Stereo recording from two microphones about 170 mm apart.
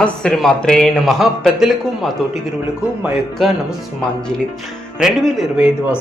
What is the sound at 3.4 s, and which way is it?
Speech, centre (ahead or behind).